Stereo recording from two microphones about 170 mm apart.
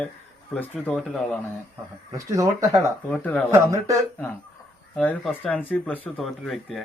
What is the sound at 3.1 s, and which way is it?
Speech, 5° left (ahead or behind).